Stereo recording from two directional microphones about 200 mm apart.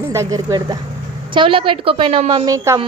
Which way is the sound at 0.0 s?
15° right (ahead or behind).